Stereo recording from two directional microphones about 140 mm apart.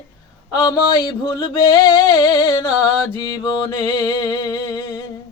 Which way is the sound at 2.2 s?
30° left (ahead or behind).